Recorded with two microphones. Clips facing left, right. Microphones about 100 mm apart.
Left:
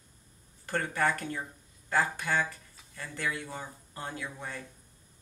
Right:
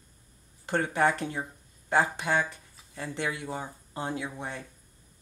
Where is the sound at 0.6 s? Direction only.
20° right (ahead or behind).